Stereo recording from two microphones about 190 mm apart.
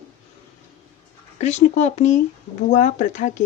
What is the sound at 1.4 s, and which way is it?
Speech, 35° left (ahead or behind).